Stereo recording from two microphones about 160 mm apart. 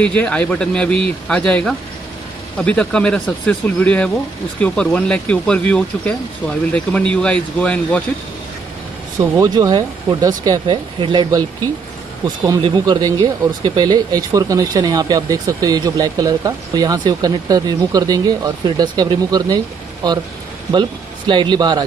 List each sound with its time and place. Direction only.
0.0 s speech: 5° left (ahead or behind)
9.4 s speech: 25° right (ahead or behind)
12.6 s speech: 25° right (ahead or behind)
21.3 s speech: 30° right (ahead or behind)